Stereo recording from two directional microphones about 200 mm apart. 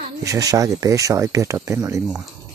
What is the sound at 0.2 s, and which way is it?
Speech, 15° right (ahead or behind).